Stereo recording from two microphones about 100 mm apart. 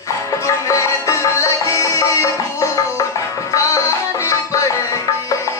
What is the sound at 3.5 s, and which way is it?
Music, 30° left (ahead or behind).